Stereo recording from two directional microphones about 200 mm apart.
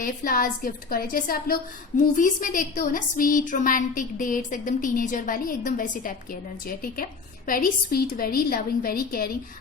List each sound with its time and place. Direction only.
0.0 s a woman's voice: 45° left (ahead or behind)